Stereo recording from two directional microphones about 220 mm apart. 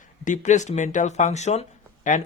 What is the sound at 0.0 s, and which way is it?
Speech, 35° left (ahead or behind).